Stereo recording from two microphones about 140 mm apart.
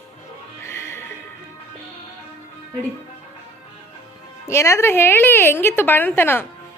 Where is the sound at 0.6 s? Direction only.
20° left (ahead or behind).